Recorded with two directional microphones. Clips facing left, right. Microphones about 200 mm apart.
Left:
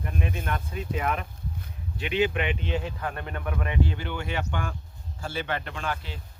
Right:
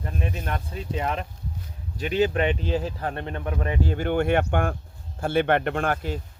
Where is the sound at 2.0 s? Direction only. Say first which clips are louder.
Right 4 dB; 40° right (ahead or behind).